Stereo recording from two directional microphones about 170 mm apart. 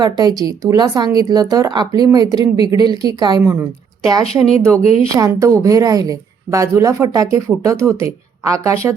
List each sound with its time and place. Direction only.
0.0 s a woman's voice: 25° right (ahead or behind)
4.8 s a woman's voice: 35° left (ahead or behind)
5.0 s a woman's voice: 20° right (ahead or behind)